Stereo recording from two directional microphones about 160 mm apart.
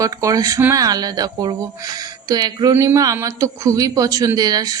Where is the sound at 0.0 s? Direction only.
20° right (ahead or behind).